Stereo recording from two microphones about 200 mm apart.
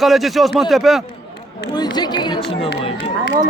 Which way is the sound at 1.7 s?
20° left (ahead or behind).